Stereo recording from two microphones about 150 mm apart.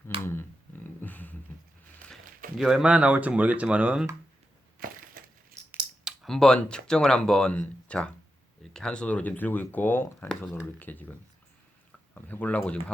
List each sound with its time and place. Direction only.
0.1 s a sound: 40° right (ahead or behind)
1.0 s a sound: 10° left (ahead or behind)
2.6 s speech: centre (ahead or behind)
5.6 s scissors: 50° right (ahead or behind)
6.1 s speech: 5° left (ahead or behind)
12.1 s speech: 10° left (ahead or behind)